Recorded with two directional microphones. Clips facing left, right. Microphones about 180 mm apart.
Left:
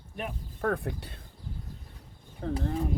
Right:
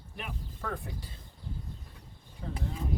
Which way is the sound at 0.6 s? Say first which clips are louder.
Left 10 dB; 60° left (ahead or behind).